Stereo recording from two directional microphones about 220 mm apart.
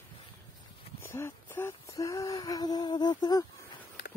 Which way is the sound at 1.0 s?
10° left (ahead or behind).